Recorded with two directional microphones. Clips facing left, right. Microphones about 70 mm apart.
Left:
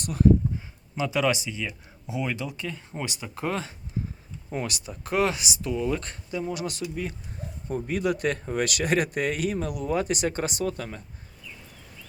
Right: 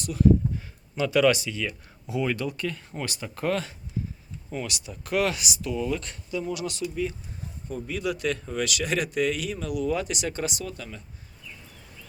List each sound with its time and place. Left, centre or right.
0.0 s speech: left
0.9 s speech: centre
4.5 s speech: left